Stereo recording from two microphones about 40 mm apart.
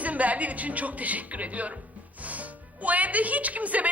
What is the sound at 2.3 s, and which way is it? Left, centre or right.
Speech, right.